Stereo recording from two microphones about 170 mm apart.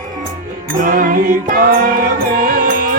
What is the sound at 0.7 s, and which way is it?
Music, 55° right (ahead or behind).